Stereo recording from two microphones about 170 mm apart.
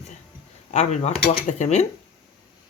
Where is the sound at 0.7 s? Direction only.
40° left (ahead or behind).